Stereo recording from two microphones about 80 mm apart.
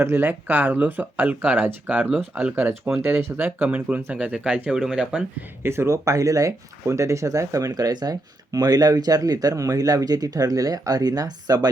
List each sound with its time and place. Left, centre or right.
0.0 s speech: right; by 5.2 s centre
5.6 s speech: right